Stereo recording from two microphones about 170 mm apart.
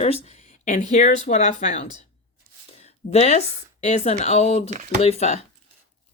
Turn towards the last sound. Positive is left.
turn(degrees=40)  # may be behind; listen again after turning